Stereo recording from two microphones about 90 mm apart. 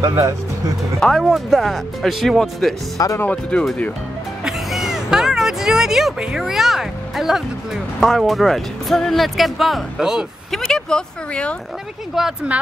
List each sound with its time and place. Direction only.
0.0 s speech: 35° right (ahead or behind)
0.9 s speech: 10° left (ahead or behind)
3.2 s speech: 15° left (ahead or behind)
4.5 s music: 5° right (ahead or behind)
8.0 s speech: centre (ahead or behind)
10.7 s speech: 10° left (ahead or behind)
12.2 s speech: 5° right (ahead or behind)